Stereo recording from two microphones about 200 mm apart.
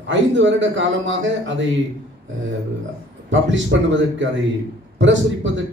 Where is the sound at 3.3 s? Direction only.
65° right (ahead or behind).